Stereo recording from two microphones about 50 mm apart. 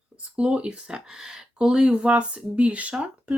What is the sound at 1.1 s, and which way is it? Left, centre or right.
Speech, centre.